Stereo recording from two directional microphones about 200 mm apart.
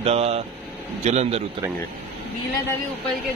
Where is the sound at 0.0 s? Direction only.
30° right (ahead or behind).